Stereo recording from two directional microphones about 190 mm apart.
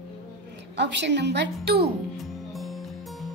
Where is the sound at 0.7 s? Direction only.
65° right (ahead or behind).